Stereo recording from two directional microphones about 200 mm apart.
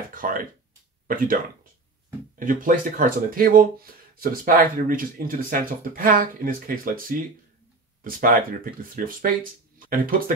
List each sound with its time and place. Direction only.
0.1 s speech: 45° right (ahead or behind)